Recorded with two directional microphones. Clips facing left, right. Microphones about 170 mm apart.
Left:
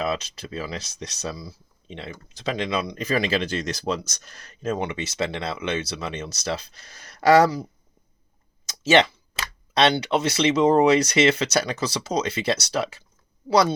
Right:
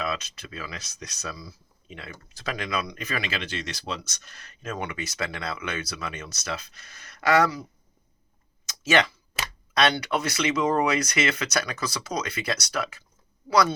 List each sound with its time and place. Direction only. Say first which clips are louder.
0.0 s speech: left 4 dB; 30° left (ahead or behind)
8.6 s a sound: left 5 dB; 25° left (ahead or behind)
9.7 s speech: left 4 dB; 25° left (ahead or behind)